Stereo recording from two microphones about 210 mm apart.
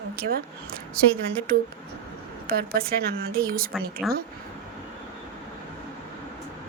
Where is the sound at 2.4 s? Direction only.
45° right (ahead or behind).